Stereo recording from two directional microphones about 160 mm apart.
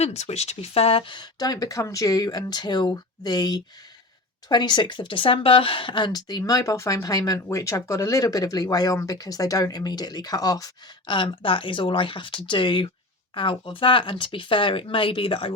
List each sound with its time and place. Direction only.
0.0 s speech: 40° left (ahead or behind)